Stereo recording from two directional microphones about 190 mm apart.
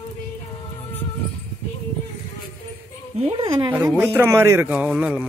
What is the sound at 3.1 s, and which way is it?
Speech, 30° right (ahead or behind).